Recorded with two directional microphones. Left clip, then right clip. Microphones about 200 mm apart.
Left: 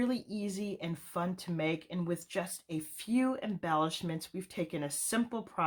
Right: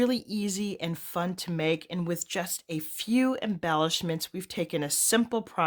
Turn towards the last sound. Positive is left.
turn(degrees=-45)  # may be behind; listen again after turning